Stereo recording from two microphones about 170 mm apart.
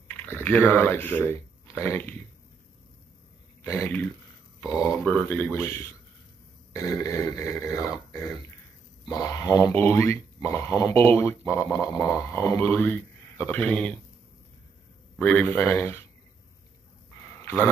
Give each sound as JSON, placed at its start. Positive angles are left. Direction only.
{"t": 0.1, "sound": "speech", "side_deg": 10}
{"t": 3.6, "sound": "speech", "side_deg": 15}
{"t": 5.0, "sound": "speech", "side_deg": 10}
{"t": 6.7, "sound": "grunt", "side_deg": 20}
{"t": 9.0, "sound": "speech", "side_deg": 20}
{"t": 15.1, "sound": "speech", "side_deg": 10}